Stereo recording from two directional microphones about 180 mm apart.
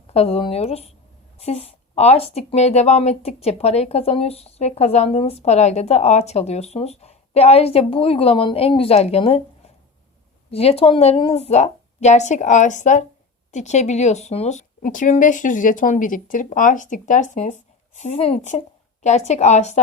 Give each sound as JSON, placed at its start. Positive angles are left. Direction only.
{"t": 0.1, "sound": "speech", "side_deg": 35}